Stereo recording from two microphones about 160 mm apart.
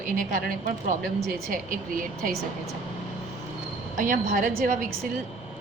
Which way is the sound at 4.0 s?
55° right (ahead or behind).